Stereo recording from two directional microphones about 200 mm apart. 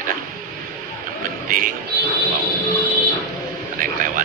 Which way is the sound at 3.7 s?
40° right (ahead or behind).